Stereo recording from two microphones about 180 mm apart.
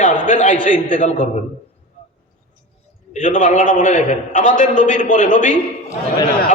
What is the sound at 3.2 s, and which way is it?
A man's voice, 45° left (ahead or behind).